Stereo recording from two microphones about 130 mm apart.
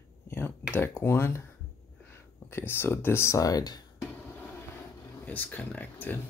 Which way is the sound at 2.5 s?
15° left (ahead or behind).